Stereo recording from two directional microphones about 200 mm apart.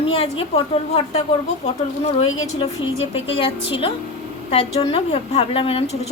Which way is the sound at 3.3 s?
25° left (ahead or behind).